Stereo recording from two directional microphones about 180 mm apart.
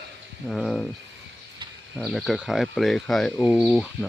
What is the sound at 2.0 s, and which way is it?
Speech, centre (ahead or behind).